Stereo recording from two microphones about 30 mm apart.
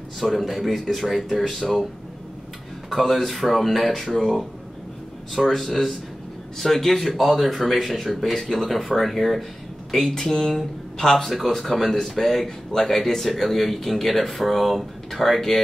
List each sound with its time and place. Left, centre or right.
0.3 s speech: centre
2.9 s speech: centre
8.4 s speech: centre
8.6 s speech: centre
11.4 s speech: centre